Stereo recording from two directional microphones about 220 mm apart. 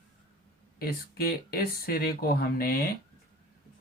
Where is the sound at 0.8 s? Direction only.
45° left (ahead or behind).